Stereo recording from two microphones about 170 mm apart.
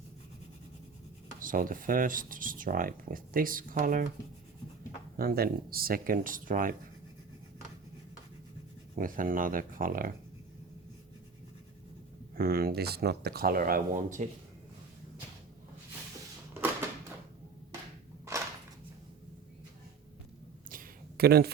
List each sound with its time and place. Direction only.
1.4 s speech: 55° right (ahead or behind)
5.1 s speech: 65° right (ahead or behind)
9.0 s speech: 55° right (ahead or behind)
12.4 s speech: 65° right (ahead or behind)
18.3 s a sound: 15° right (ahead or behind)
20.7 s a sound: 60° right (ahead or behind)